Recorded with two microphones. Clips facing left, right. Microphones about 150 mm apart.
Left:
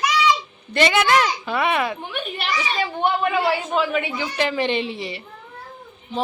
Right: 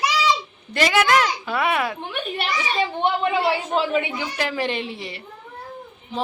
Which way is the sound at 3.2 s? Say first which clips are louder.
Even; 25° right (ahead or behind).